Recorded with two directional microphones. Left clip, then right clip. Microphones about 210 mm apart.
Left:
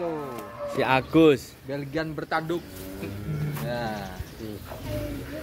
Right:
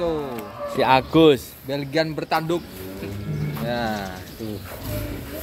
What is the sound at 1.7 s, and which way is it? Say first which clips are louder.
Speech: right 7 dB; 45° right (ahead or behind).